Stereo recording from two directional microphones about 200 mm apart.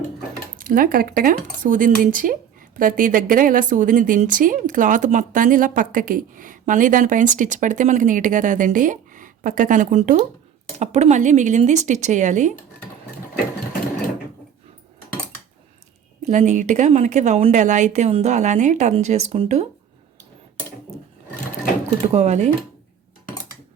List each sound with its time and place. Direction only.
0.6 s speech: 45° right (ahead or behind)
16.2 s speech: 35° right (ahead or behind)
22.1 s speech: 35° right (ahead or behind)